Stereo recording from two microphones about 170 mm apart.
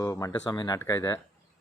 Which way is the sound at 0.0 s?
20° left (ahead or behind).